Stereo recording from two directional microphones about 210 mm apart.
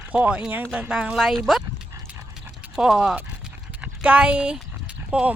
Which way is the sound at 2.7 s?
Centre (ahead or behind).